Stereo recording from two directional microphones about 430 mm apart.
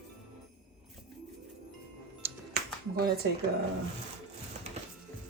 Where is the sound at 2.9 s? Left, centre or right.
Right.